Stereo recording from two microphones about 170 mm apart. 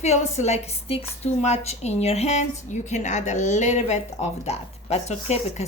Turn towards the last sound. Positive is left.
turn(degrees=40)  # may be behind; listen again after turning